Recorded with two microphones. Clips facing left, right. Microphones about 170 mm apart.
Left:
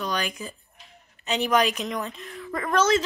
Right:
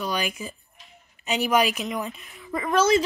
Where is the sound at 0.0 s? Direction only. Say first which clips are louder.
Right 1 dB; 5° right (ahead or behind).